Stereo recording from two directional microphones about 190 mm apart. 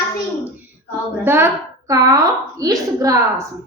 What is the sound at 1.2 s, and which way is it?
A woman's voice, 10° right (ahead or behind).